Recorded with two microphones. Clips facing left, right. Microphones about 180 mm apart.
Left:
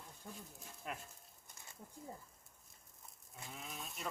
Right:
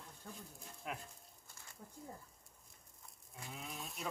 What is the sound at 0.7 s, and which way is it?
Speech, centre (ahead or behind).